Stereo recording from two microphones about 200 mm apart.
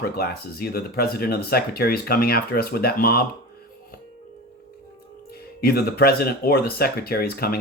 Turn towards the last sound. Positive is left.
turn(degrees=50)  # may be behind; listen again after turning